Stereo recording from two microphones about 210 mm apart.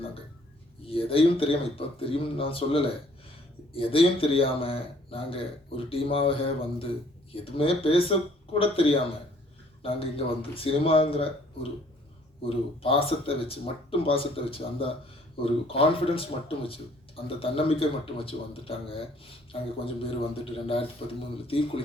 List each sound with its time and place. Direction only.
0.9 s speech: 25° left (ahead or behind)
12.4 s speech: 25° left (ahead or behind)